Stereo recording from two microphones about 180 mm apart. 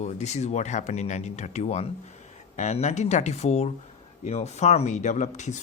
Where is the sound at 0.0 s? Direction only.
40° left (ahead or behind).